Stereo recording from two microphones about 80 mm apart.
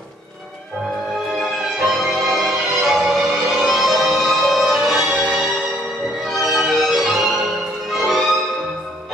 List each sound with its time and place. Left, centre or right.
1.4 s music: centre
6.5 s music: centre